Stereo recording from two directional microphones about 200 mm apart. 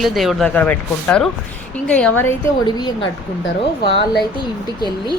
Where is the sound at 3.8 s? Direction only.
55° left (ahead or behind).